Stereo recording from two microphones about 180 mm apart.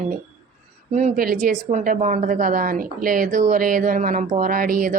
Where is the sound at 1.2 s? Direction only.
50° right (ahead or behind).